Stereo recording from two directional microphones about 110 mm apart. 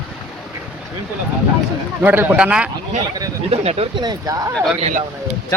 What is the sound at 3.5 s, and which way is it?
Speech, 70° right (ahead or behind).